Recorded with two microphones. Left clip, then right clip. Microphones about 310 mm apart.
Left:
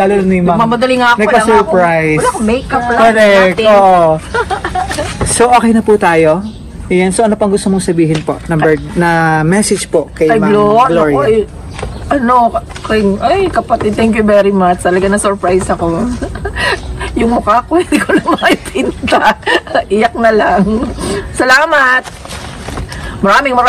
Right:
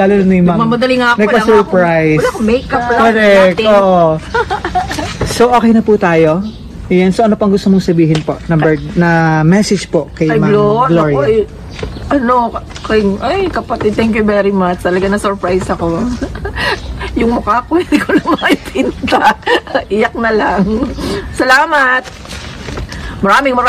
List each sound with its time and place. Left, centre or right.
0.0 s speech: left
0.6 s speech: centre
1.8 s speech: left
2.2 s speech: centre
3.1 s speech: left
4.3 s a sound: centre
5.3 s speech: left
10.5 s speech: centre
23.2 s speech: centre